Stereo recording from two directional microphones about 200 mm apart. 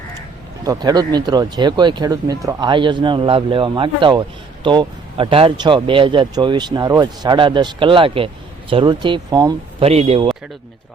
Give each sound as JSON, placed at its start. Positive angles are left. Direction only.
{"t": 0.6, "sound": "speech", "side_deg": -20}
{"t": 9.8, "sound": "speech", "side_deg": -30}